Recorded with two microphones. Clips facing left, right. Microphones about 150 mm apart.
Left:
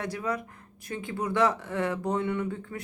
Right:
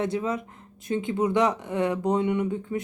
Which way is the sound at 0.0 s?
20° right (ahead or behind).